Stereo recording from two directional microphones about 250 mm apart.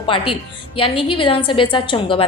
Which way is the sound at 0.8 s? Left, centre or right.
Left.